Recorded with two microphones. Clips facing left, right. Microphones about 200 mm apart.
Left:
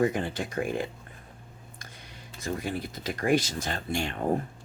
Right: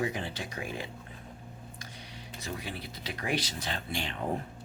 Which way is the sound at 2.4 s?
50° left (ahead or behind).